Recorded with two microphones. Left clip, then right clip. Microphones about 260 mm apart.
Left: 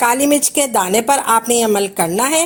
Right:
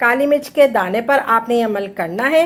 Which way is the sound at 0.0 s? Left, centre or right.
Left.